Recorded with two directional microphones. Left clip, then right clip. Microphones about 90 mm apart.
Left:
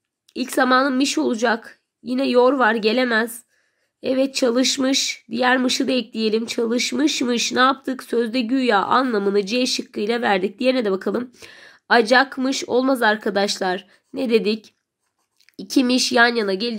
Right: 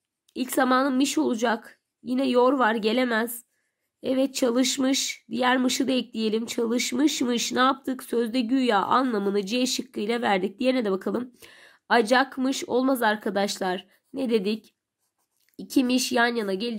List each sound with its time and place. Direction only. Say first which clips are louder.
0.3 s a woman's voice: left 5 dB; 30° right (ahead or behind)